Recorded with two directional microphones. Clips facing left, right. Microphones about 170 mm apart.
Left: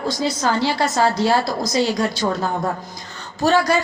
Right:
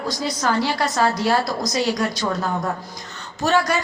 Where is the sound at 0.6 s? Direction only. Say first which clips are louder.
Left 3 dB; 25° left (ahead or behind).